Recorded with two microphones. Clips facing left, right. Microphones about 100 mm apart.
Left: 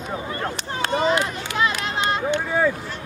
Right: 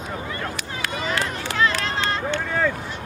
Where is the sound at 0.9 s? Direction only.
30° left (ahead or behind).